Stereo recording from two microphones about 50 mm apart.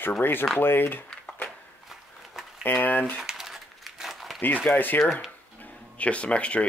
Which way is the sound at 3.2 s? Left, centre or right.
Centre.